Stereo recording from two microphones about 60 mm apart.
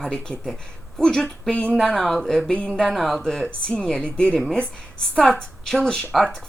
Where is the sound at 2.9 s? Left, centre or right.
Centre.